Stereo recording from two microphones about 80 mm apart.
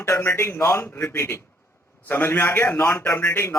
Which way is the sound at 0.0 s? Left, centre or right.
Left.